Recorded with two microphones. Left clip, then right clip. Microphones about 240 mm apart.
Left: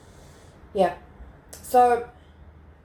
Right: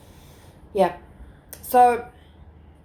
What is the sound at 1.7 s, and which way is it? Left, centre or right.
Speech, right.